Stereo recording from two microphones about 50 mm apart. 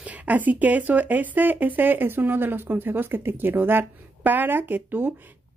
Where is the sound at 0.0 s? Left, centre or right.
Right.